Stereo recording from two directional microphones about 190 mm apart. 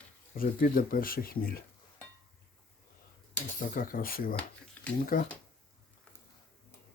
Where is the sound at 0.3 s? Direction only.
50° left (ahead or behind).